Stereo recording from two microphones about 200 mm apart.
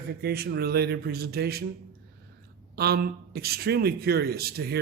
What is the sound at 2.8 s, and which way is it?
A man's voice, 50° right (ahead or behind).